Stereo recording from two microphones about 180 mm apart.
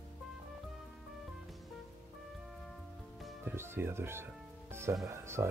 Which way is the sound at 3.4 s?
15° right (ahead or behind).